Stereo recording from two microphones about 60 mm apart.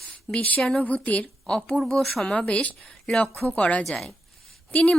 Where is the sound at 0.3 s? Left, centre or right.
Left.